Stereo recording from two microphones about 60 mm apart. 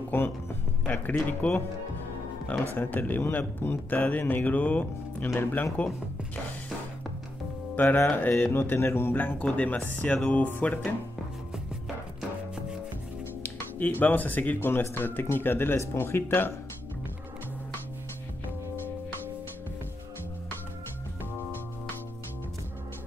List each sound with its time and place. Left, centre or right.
0.1 s speech: left
2.7 s speech: left
7.7 s speech: left
9.1 s speech: left
13.4 s speech: left